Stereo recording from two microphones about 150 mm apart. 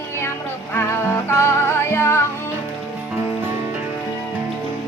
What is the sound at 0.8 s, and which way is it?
Music, 15° left (ahead or behind).